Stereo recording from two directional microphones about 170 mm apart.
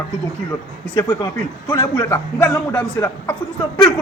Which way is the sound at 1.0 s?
20° left (ahead or behind).